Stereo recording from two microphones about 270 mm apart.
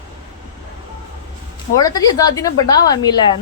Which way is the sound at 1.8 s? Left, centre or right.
Centre.